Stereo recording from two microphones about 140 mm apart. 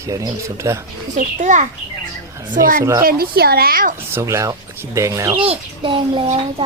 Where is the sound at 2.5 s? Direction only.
85° right.